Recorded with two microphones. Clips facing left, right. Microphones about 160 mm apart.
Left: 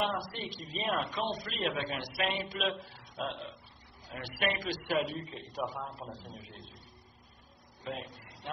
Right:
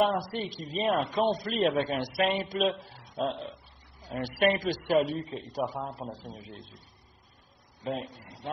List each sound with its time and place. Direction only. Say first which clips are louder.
0.0 s a man's voice: right 7 dB; 45° right (ahead or behind)
7.8 s a man's voice: right 6 dB; 35° right (ahead or behind)